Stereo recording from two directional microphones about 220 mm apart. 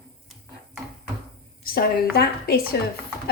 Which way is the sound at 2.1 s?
45° left (ahead or behind).